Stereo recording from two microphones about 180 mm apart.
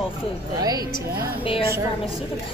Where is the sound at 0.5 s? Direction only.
20° right (ahead or behind).